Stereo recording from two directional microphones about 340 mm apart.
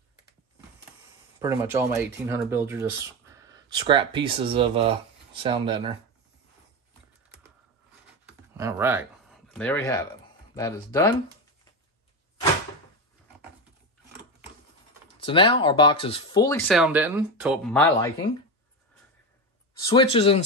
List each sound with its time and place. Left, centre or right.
1.4 s speech: centre
8.5 s speech: centre
15.1 s speech: centre
19.8 s speech: centre